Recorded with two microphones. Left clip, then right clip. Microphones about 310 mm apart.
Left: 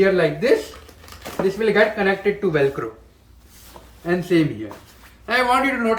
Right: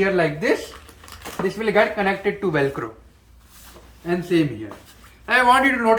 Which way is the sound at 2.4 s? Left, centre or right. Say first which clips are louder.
Left 2 dB; centre.